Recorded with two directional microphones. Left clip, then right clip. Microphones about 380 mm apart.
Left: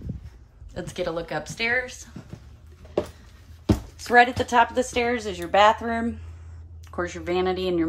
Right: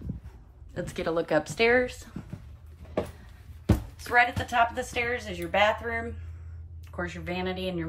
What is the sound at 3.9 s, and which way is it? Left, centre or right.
Speech, centre.